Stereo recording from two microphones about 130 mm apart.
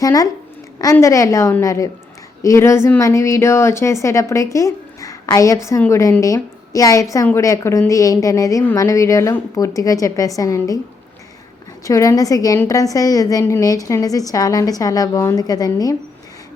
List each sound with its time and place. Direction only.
0.0 s a woman's voice: 25° left (ahead or behind)
4.5 s a sound: 25° left (ahead or behind)
5.9 s a woman's voice: 25° left (ahead or behind)
11.9 s a woman's voice: 25° left (ahead or behind)